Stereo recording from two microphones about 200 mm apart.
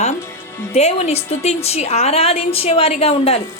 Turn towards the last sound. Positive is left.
turn(degrees=30)  # may be behind; listen again after turning